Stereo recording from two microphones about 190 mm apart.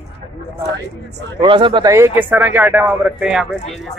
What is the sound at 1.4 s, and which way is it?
Speech, 25° right (ahead or behind).